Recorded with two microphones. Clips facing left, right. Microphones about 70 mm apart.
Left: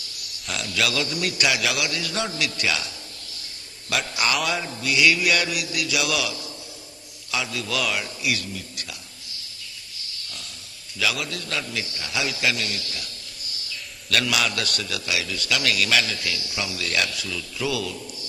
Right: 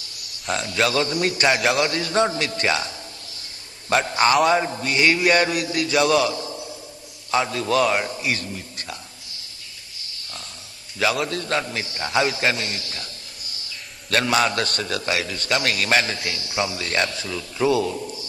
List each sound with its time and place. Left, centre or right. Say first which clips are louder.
0.5 s a man's voice: right 4 dB; right
3.9 s a man's voice: right 7 dB; right
11.0 s a man's voice: right 5 dB; right